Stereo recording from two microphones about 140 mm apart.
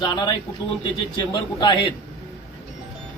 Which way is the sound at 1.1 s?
30° left (ahead or behind).